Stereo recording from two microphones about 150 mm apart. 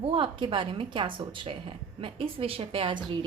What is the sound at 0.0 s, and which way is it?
A woman's voice, 35° right (ahead or behind).